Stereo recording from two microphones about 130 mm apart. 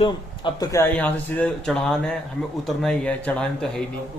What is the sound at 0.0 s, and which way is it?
Speech, 40° left (ahead or behind).